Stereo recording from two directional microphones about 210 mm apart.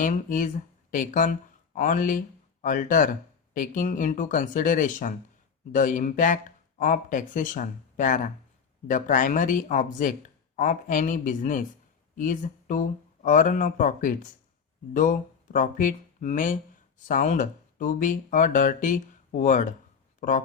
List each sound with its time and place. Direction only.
0.0 s speech: 40° left (ahead or behind)